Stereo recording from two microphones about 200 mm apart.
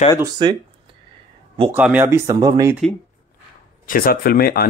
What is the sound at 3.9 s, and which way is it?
Speech, 45° left (ahead or behind).